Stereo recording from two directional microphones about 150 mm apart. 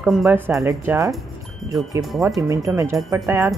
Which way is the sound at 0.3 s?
20° right (ahead or behind).